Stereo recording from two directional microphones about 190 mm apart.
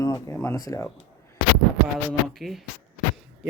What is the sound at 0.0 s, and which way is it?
Speech, 15° left (ahead or behind).